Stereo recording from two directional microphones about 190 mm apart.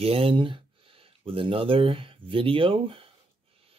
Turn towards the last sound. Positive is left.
turn(degrees=-30)  # may be behind; listen again after turning